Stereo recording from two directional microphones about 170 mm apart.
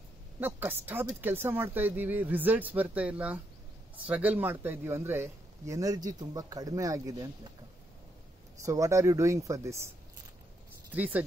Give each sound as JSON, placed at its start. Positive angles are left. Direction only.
{"t": 0.4, "sound": "speech", "side_deg": -10}
{"t": 8.6, "sound": "speech", "side_deg": -20}
{"t": 10.9, "sound": "speech", "side_deg": -10}